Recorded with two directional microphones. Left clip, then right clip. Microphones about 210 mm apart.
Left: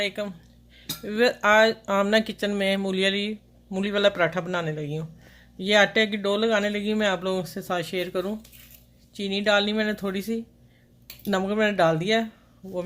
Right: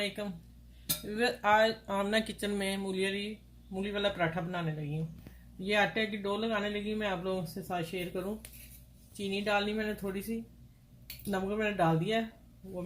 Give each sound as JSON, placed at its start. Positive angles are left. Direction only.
{"t": 0.2, "sound": "speech", "side_deg": 35}
{"t": 5.6, "sound": "speech", "side_deg": 50}